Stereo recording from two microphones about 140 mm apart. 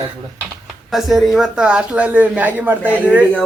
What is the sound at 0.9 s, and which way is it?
Speech, centre (ahead or behind).